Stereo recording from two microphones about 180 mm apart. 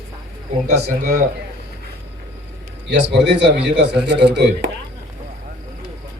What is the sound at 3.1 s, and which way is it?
A man's voice, 80° right.